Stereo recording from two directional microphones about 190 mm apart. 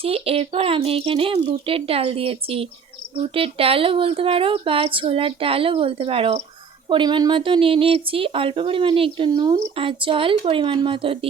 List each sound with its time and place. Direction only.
0.0 s speech: 30° right (ahead or behind)